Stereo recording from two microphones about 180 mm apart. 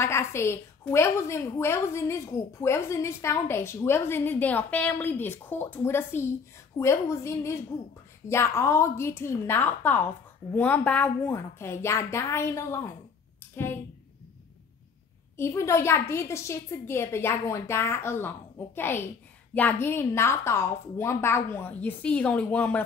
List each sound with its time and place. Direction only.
0.0 s a woman's voice: 15° left (ahead or behind)
15.3 s a woman's voice: 15° left (ahead or behind)